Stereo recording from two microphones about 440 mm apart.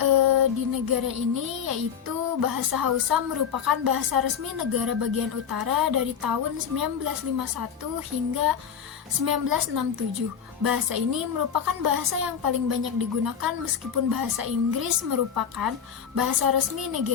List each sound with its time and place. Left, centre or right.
0.0 s child singing: right
9.2 s child singing: right